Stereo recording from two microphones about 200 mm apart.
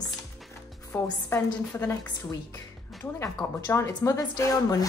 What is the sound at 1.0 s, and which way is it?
A woman's voice, 10° left (ahead or behind).